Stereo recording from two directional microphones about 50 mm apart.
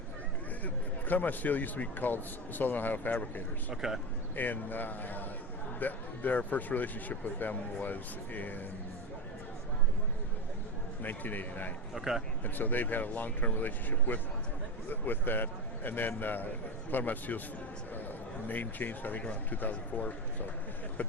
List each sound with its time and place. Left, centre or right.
0.6 s a man's voice: left
3.7 s speech: centre
4.4 s a man's voice: left
11.0 s a man's voice: left
11.9 s speech: centre
12.5 s a man's voice: left
18.4 s a man's voice: left